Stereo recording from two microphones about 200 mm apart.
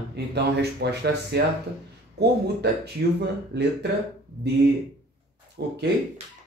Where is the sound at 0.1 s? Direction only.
55° right (ahead or behind).